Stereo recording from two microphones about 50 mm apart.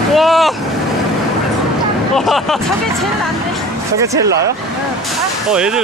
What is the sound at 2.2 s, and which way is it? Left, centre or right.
Speech, centre.